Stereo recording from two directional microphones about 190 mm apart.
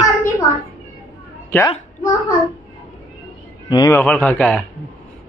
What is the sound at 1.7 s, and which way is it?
Speech, 20° left (ahead or behind).